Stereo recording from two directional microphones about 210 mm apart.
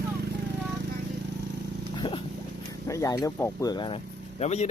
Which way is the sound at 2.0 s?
20° left (ahead or behind).